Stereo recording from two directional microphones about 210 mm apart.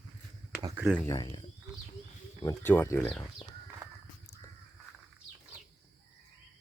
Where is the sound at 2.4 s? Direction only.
15° left (ahead or behind).